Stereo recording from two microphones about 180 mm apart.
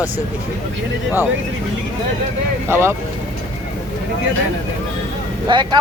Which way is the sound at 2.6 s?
15° right (ahead or behind).